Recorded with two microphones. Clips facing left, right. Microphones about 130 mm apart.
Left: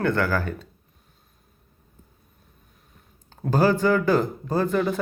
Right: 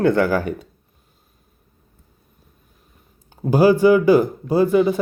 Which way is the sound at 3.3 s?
10° right (ahead or behind).